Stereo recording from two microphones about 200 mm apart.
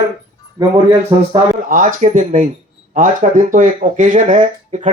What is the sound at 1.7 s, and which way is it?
Speech, 45° right (ahead or behind).